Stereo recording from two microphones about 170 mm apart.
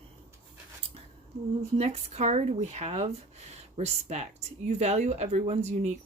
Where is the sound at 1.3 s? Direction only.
40° right (ahead or behind).